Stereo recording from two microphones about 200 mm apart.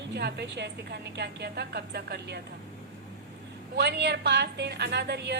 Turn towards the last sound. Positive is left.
turn(degrees=-55)  # may be behind; listen again after turning